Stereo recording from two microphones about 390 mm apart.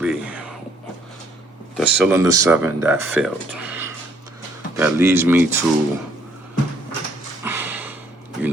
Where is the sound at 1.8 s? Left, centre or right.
Centre.